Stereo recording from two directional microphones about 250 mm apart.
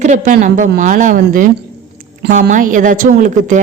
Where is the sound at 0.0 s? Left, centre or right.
Right.